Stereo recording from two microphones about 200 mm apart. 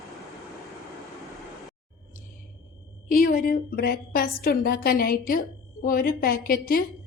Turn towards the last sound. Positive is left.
turn(degrees=45)  # may be behind; listen again after turning